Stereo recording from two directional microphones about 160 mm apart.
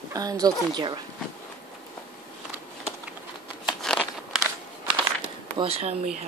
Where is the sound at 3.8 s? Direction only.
5° left (ahead or behind).